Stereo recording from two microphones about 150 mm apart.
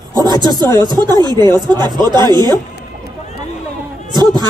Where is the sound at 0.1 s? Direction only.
30° right (ahead or behind).